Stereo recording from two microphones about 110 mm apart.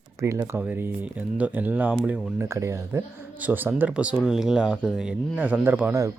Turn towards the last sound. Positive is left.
turn(degrees=-15)  # may be behind; listen again after turning